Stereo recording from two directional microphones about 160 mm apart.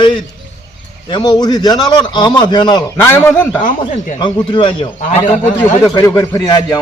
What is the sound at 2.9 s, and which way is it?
Speech, 15° left (ahead or behind).